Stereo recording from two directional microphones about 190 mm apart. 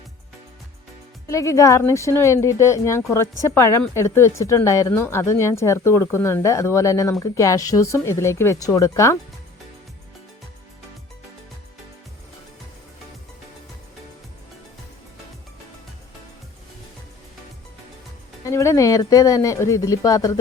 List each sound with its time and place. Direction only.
1.3 s speech: 15° left (ahead or behind)
18.4 s speech: 15° left (ahead or behind)